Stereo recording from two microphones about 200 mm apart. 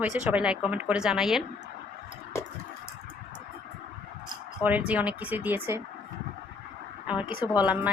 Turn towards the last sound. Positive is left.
turn(degrees=-5)  # may be behind; listen again after turning